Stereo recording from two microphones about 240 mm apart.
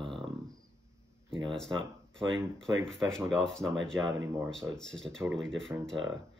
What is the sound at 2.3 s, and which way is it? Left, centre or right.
Speech, centre.